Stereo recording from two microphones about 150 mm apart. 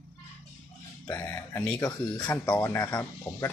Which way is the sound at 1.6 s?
10° left (ahead or behind).